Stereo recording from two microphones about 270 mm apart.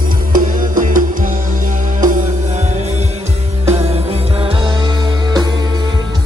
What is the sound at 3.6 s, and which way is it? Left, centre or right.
Music, right.